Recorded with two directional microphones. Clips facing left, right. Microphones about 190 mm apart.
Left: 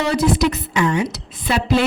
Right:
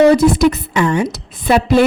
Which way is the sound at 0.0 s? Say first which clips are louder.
Right 8 dB; 50° right (ahead or behind).